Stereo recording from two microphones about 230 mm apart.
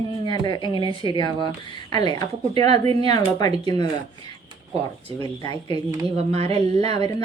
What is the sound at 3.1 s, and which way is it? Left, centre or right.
Speech, centre.